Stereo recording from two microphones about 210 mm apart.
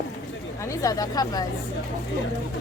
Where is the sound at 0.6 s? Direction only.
15° left (ahead or behind).